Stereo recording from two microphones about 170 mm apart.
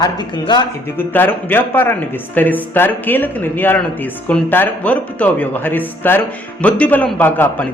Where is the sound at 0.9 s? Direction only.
10° left (ahead or behind).